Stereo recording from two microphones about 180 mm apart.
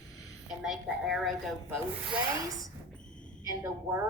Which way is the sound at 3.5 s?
15° right (ahead or behind).